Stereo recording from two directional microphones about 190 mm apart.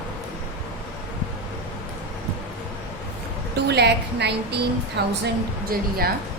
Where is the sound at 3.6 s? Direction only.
60° right (ahead or behind).